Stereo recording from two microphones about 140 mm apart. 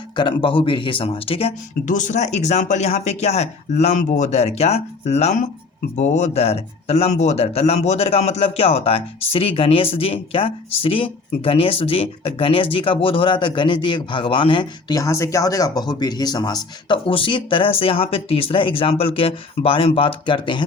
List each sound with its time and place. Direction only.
0.2 s speech: 35° left (ahead or behind)
1.9 s speech: 60° left (ahead or behind); by 20.7 s 35° left (ahead or behind)